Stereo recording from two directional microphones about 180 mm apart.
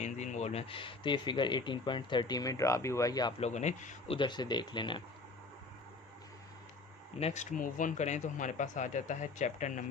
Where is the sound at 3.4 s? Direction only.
40° left (ahead or behind).